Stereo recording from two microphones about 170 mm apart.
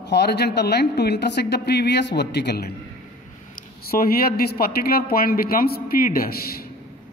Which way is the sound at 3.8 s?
60° left (ahead or behind).